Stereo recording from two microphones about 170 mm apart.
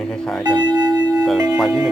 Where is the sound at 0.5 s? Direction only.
25° right (ahead or behind).